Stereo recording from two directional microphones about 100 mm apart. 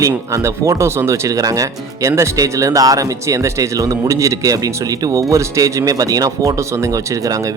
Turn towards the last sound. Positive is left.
turn(degrees=-35)  # may be behind; listen again after turning